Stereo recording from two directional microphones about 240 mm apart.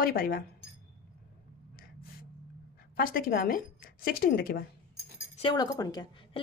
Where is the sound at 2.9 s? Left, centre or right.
Left.